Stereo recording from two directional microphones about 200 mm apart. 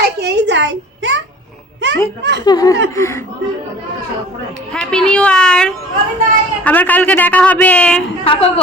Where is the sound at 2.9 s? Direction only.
15° left (ahead or behind).